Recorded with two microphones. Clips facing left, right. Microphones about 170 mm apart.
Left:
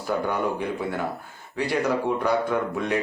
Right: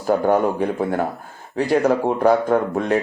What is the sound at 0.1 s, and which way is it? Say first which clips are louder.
Speech: right 8 dB; 45° right (ahead or behind).